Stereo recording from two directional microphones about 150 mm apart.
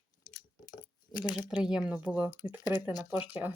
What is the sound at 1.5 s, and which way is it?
Speech, 5° right (ahead or behind).